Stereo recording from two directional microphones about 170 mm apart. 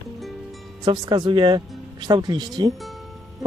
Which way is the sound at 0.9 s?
25° right (ahead or behind).